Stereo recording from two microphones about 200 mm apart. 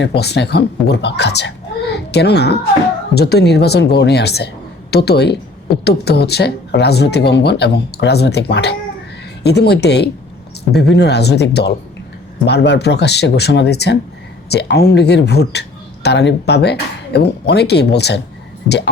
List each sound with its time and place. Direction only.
0.0 s speech: 55° left (ahead or behind)